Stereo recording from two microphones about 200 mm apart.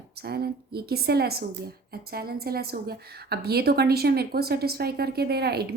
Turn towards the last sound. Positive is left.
turn(degrees=-55)  # may be behind; listen again after turning